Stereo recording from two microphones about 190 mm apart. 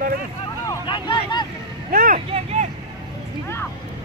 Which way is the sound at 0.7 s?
25° left (ahead or behind).